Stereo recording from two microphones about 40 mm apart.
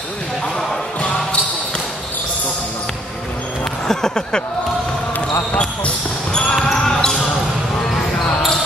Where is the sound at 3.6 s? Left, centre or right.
Centre.